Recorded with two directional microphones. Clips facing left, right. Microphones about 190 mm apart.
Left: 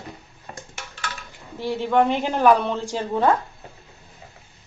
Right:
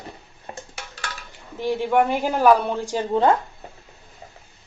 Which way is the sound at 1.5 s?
15° right (ahead or behind).